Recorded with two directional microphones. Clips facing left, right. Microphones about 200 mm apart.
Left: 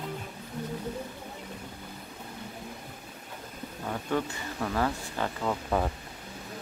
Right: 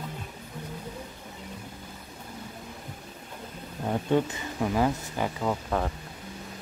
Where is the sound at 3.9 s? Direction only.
20° right (ahead or behind).